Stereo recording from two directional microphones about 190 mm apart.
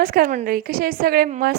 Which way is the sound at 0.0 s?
50° right (ahead or behind).